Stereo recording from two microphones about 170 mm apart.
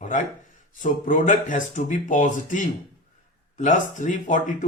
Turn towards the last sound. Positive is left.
turn(degrees=50)  # may be behind; listen again after turning